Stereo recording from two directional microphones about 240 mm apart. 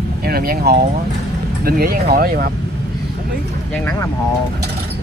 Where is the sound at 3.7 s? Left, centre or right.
Centre.